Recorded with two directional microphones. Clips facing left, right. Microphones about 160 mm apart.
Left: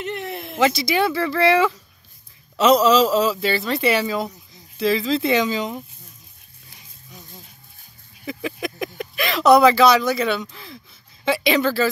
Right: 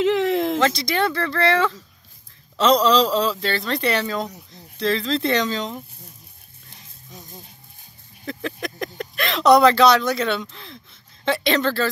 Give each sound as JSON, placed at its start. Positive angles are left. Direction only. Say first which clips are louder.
{"t": 0.0, "sound": "a sound", "louder": "right 10 dB", "side_deg": -90}
{"t": 0.6, "sound": "speech", "louder": "left 2 dB", "side_deg": 5}
{"t": 8.3, "sound": "speech", "louder": "left 1 dB", "side_deg": 5}